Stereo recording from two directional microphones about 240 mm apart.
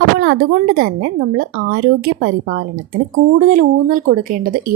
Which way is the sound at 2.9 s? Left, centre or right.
Right.